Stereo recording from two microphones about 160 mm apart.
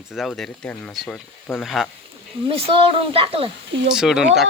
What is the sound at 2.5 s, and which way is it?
Speech, 35° right (ahead or behind).